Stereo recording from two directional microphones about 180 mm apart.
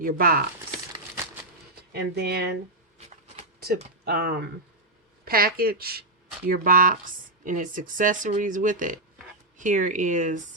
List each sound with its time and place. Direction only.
0.0 s speech: 50° right (ahead or behind)
1.9 s speech: 65° right (ahead or behind)
3.6 s speech: 60° right (ahead or behind); by 10.4 s 45° right (ahead or behind)